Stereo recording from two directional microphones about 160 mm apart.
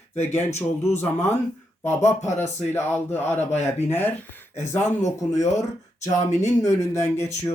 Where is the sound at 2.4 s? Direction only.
15° left (ahead or behind).